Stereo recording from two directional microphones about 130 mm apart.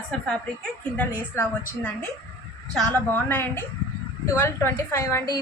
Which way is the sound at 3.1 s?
15° left (ahead or behind).